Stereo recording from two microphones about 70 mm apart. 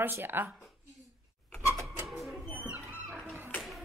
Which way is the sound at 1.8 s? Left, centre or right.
Centre.